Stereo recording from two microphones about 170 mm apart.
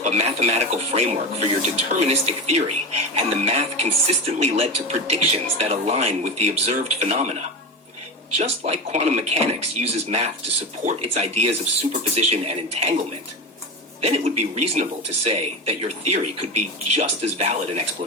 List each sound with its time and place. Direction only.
0.0 s speech: 40° right (ahead or behind)
8.4 s speech: 35° right (ahead or behind)
14.0 s speech: 40° right (ahead or behind)